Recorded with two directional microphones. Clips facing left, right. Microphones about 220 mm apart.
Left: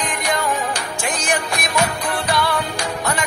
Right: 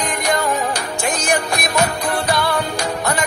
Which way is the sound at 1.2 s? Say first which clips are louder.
Right 2 dB; 40° right (ahead or behind).